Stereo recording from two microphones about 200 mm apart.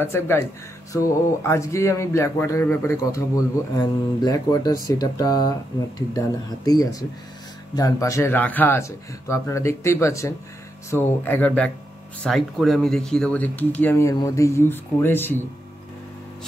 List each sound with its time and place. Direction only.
0.0 s speech: 10° left (ahead or behind)